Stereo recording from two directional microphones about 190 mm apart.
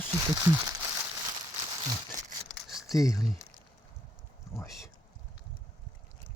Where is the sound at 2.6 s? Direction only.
Centre (ahead or behind).